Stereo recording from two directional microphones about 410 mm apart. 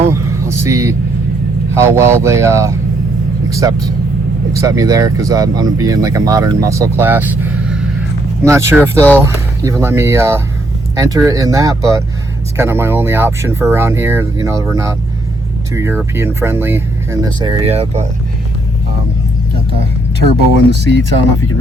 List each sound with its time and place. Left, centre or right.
0.0 s vehicle: centre
1.7 s speech: centre
20.7 s speech: right